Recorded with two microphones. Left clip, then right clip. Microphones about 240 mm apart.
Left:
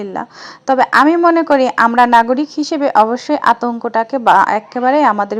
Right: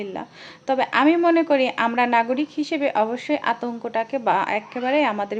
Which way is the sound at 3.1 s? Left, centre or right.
Centre.